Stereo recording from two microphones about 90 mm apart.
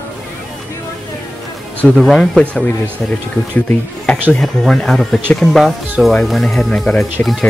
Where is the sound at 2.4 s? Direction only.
15° left (ahead or behind).